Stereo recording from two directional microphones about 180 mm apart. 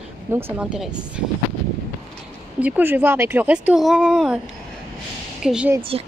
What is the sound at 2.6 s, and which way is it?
Speech, 10° right (ahead or behind).